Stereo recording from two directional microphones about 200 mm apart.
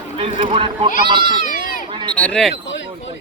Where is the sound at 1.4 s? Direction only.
45° left (ahead or behind).